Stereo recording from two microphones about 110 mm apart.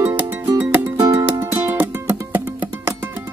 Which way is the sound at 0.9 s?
30° right (ahead or behind).